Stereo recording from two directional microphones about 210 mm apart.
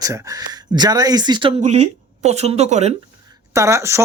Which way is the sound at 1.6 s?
30° right (ahead or behind).